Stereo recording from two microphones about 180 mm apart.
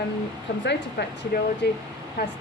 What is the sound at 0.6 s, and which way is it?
Speech, 65° left (ahead or behind).